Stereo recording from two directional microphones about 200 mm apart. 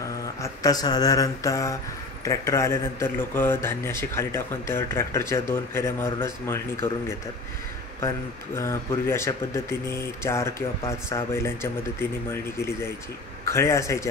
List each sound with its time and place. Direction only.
0.4 s speech: 20° left (ahead or behind)
8.5 s speech: 15° left (ahead or behind)